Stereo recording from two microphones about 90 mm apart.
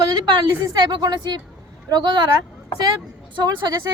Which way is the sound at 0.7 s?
50° right (ahead or behind).